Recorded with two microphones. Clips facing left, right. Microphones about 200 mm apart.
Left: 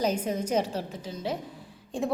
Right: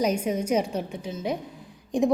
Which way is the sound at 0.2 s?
10° right (ahead or behind).